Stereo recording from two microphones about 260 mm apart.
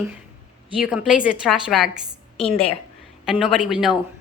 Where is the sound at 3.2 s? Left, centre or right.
Centre.